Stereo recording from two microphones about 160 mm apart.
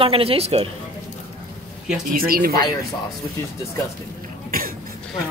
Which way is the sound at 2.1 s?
65° right (ahead or behind).